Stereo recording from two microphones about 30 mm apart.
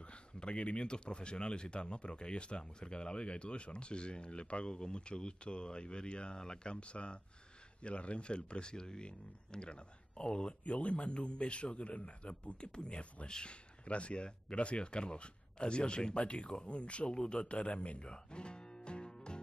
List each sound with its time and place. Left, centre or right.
0.0 s speech: left
6.8 s speech: left
10.6 s speech: left
18.0 s music: left